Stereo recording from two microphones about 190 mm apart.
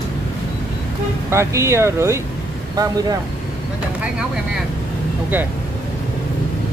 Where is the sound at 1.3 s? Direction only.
15° right (ahead or behind).